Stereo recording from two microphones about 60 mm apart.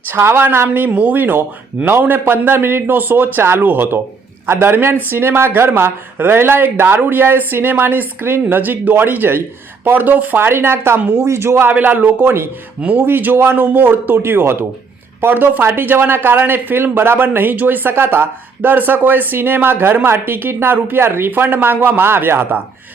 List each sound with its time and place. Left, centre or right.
0.1 s a man's voice: right
11.7 s speech: right